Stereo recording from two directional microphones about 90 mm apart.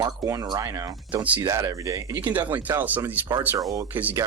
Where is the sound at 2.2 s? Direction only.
20° right (ahead or behind).